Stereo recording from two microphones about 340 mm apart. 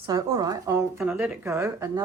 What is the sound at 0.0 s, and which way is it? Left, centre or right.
A woman's voice, centre.